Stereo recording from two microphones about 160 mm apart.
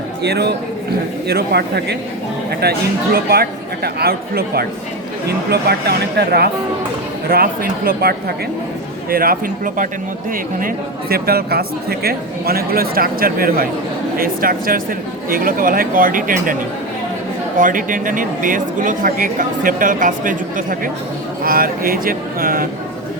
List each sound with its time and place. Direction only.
0.2 s speech: 90° right
2.6 s speech: 75° right (ahead or behind)
7.3 s speech: 65° right (ahead or behind)
11.1 s speech: 75° right (ahead or behind)
17.6 s speech: 55° right (ahead or behind)